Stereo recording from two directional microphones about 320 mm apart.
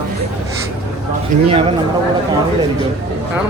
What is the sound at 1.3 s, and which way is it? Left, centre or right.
Speech, centre.